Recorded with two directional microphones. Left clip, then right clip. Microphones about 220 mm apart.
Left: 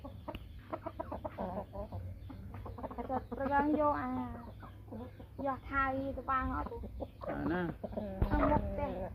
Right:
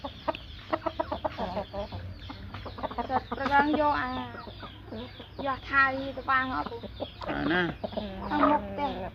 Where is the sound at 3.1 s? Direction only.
20° left (ahead or behind).